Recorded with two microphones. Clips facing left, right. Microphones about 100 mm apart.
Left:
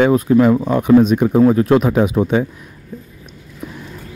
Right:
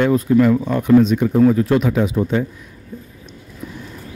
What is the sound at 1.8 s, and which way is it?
Speech, 50° left (ahead or behind).